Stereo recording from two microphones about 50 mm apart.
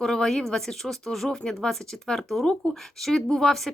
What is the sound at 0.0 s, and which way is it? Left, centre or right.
Speech, centre.